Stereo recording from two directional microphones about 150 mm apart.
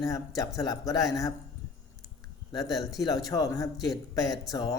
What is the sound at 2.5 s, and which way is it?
A man's voice, 25° left (ahead or behind).